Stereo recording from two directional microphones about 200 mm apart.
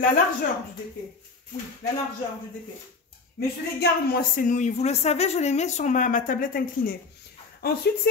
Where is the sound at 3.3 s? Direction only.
50° left (ahead or behind).